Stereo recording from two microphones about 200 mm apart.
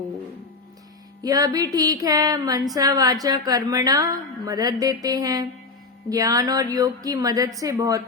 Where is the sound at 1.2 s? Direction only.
20° right (ahead or behind).